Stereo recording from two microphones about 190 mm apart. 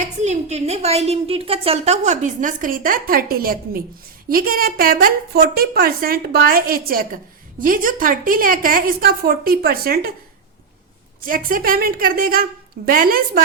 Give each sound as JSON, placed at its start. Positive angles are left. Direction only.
{"t": 0.0, "sound": "a woman's voice", "side_deg": -35}
{"t": 11.2, "sound": "a woman's voice", "side_deg": -50}